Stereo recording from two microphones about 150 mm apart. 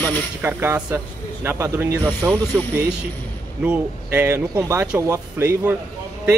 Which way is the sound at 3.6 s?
10° right (ahead or behind).